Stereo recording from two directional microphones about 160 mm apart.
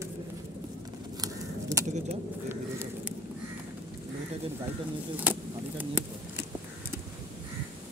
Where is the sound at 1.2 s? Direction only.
20° right (ahead or behind).